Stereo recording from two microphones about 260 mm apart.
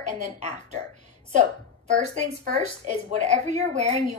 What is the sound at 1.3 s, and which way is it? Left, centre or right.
A woman's voice, right.